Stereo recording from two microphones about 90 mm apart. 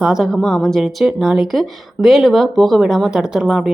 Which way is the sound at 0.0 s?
5° right (ahead or behind).